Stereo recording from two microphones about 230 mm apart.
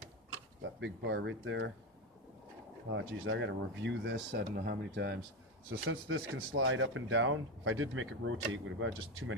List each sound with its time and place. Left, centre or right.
0.6 s speech: right
2.9 s speech: right
5.9 s speech: right